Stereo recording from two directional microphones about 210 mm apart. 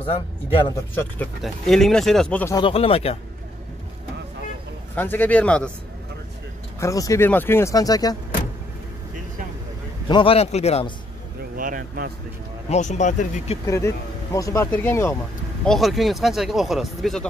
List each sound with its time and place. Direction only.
0.7 s speech: 10° left (ahead or behind)
2.5 s a man's voice: 25° left (ahead or behind)
4.9 s speech: 10° left (ahead or behind)
6.8 s speech: 15° left (ahead or behind)
10.0 s a man's voice: 25° left (ahead or behind)
11.5 s speech: 40° right (ahead or behind)
12.6 s speech: 35° left (ahead or behind)
13.7 s speech: 15° left (ahead or behind)
15.6 s speech: centre (ahead or behind)